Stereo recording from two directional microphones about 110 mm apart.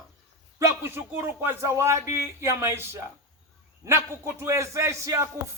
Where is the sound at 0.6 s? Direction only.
20° right (ahead or behind).